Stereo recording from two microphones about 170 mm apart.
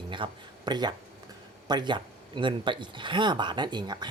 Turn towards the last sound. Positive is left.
turn(degrees=-25)  # may be behind; listen again after turning